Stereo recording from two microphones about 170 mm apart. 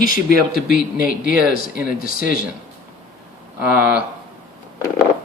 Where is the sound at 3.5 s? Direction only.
5° right (ahead or behind).